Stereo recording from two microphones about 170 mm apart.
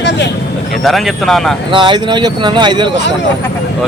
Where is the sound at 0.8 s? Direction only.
Centre (ahead or behind).